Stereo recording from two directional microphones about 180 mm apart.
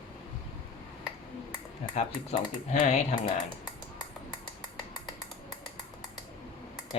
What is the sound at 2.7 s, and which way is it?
Speech, 40° left (ahead or behind).